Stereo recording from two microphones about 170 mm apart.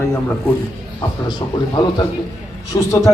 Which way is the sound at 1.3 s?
25° left (ahead or behind).